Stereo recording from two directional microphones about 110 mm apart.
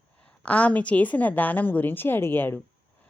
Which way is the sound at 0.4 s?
10° left (ahead or behind).